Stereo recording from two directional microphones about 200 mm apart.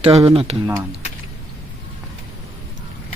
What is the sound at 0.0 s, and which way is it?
Speech, 30° right (ahead or behind).